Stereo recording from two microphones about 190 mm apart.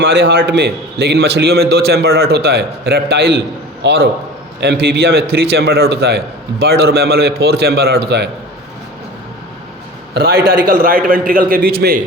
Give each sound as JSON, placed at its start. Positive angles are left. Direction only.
{"t": 0.0, "sound": "a man's voice", "side_deg": -70}
{"t": 10.2, "sound": "a man's voice", "side_deg": -55}